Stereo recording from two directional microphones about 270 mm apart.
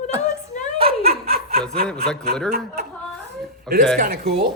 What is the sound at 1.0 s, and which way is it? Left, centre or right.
Snicker, right.